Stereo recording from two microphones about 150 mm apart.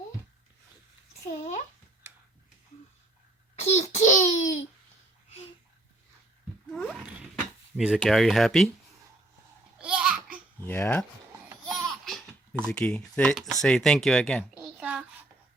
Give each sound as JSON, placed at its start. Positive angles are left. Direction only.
{"t": 3.5, "sound": "a child's voice", "side_deg": 50}
{"t": 6.7, "sound": "a sound", "side_deg": 5}
{"t": 7.8, "sound": "speech", "side_deg": 0}
{"t": 9.7, "sound": "babbling", "side_deg": -5}
{"t": 10.7, "sound": "speech", "side_deg": 15}
{"t": 11.7, "sound": "laughter", "side_deg": 0}
{"t": 12.6, "sound": "speech", "side_deg": 5}
{"t": 14.8, "sound": "a sound", "side_deg": -5}